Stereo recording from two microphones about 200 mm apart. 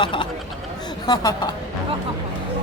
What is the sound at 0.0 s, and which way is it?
Speech, 25° left (ahead or behind).